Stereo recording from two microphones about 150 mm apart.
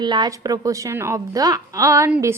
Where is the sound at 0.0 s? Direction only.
30° right (ahead or behind).